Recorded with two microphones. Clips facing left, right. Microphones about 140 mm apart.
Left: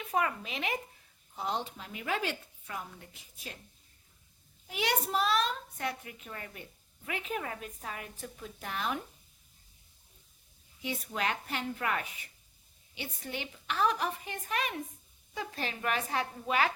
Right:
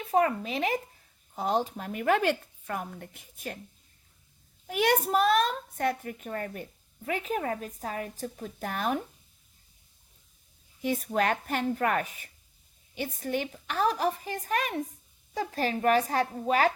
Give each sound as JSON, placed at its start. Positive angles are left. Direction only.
{"t": 0.0, "sound": "a child's voice", "side_deg": -35}
{"t": 4.6, "sound": "a child's voice", "side_deg": -50}
{"t": 10.8, "sound": "a child's voice", "side_deg": -45}